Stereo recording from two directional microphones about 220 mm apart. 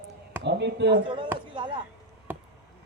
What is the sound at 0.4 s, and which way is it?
Speech, 50° right (ahead or behind).